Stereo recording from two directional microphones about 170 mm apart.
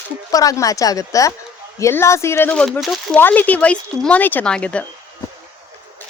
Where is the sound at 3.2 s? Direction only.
10° left (ahead or behind).